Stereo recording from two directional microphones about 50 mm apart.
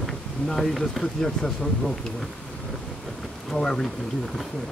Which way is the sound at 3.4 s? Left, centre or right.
Centre.